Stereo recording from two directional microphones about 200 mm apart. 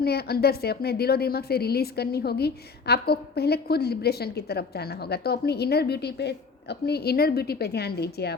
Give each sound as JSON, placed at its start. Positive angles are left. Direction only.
{"t": 0.0, "sound": "a woman's voice", "side_deg": 55}